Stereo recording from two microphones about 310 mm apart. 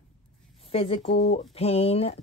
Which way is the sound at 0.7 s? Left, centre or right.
Centre.